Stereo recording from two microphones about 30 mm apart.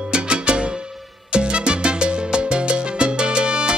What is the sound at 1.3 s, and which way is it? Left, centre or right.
Salsa music, right.